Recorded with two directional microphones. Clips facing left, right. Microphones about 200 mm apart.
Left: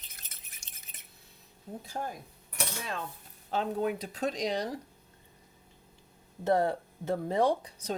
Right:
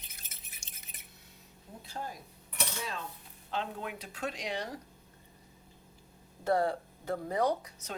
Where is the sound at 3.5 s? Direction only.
40° left (ahead or behind).